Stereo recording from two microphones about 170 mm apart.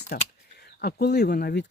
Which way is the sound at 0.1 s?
60° left (ahead or behind).